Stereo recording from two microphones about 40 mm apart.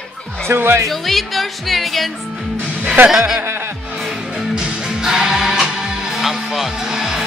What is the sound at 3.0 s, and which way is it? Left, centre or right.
Speech, centre.